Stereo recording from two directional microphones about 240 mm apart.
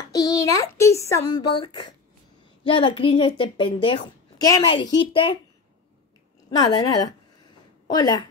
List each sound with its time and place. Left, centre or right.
0.1 s a child's voice: centre
6.7 s a woman's voice: centre